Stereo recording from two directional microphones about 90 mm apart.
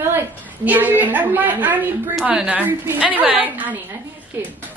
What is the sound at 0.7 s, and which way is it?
A woman's voice, 20° right (ahead or behind).